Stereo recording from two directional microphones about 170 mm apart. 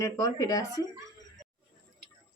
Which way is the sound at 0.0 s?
20° left (ahead or behind).